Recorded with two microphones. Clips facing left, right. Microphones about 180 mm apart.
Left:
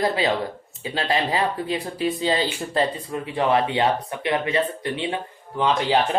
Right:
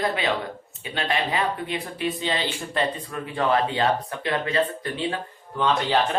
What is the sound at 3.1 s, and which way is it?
Speech, 20° left (ahead or behind).